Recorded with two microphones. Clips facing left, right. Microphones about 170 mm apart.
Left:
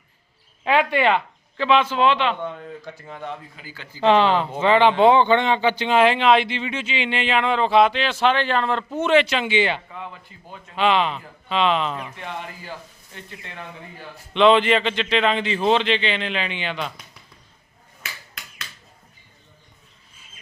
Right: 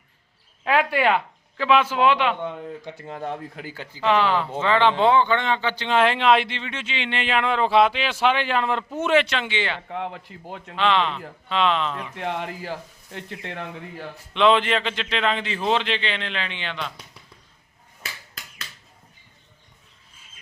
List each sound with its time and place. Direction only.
0.6 s speech: centre (ahead or behind)
3.1 s a man's voice: 35° right (ahead or behind)
3.3 s speech: 65° right (ahead or behind)
4.0 s a man's voice: 25° left (ahead or behind)
6.0 s speech: centre (ahead or behind)
9.9 s a man's voice: 75° right (ahead or behind)
10.8 s a man's voice: 10° left (ahead or behind)
12.1 s a man's voice: 85° right
14.3 s speech: centre (ahead or behind)
18.0 s finger snapping: 35° right (ahead or behind)